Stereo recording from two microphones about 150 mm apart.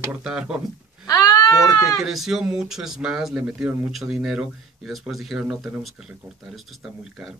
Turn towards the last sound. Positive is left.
turn(degrees=-5)  # may be behind; listen again after turning